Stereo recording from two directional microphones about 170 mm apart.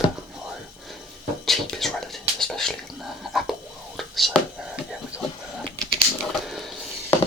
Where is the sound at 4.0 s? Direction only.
Centre (ahead or behind).